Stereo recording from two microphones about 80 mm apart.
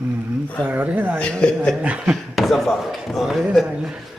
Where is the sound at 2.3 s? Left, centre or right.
Centre.